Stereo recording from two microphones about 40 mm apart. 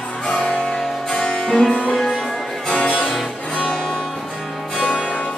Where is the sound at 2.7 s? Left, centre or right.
Left.